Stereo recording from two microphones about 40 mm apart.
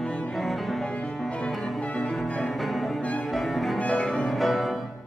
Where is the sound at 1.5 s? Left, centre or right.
Centre.